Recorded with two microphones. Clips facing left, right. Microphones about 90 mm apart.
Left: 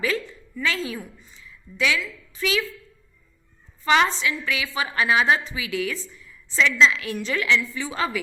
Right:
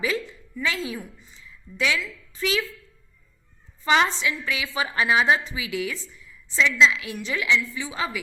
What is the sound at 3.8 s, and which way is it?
A woman's voice, 20° right (ahead or behind).